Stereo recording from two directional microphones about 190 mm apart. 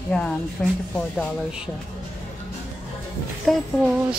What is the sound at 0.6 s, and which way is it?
A woman's voice, 5° left (ahead or behind).